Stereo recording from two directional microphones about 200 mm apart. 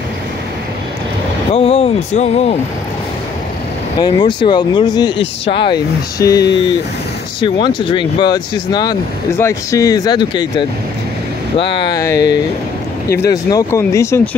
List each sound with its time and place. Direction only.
1.5 s a sound: 30° left (ahead or behind)
4.0 s speech: 25° left (ahead or behind)
11.7 s speech: 20° left (ahead or behind)